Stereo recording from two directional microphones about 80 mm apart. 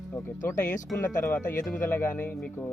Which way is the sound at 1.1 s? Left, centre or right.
Left.